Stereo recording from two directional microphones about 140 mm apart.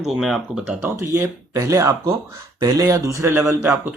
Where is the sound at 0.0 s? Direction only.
Centre (ahead or behind).